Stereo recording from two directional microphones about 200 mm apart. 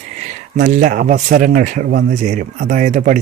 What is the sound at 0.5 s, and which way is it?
Speech, 40° right (ahead or behind).